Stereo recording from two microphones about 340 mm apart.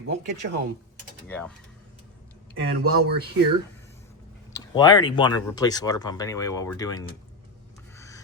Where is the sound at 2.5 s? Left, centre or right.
Right.